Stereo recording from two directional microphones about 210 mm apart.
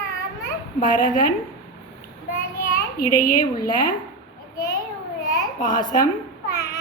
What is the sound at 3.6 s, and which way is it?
Speech, 40° left (ahead or behind).